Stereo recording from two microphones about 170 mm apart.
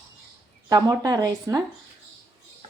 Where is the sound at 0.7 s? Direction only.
20° right (ahead or behind).